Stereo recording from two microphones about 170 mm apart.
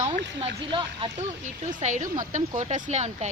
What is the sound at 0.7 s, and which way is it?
Speech, 30° right (ahead or behind).